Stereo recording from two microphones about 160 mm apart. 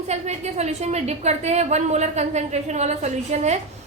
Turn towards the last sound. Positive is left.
turn(degrees=-45)  # may be behind; listen again after turning